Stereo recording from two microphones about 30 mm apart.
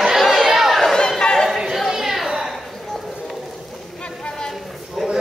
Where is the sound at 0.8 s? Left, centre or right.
Centre.